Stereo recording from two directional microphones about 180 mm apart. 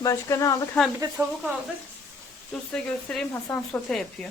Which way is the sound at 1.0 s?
20° right (ahead or behind).